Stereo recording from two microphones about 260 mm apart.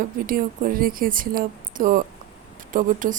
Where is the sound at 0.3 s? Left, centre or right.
Right.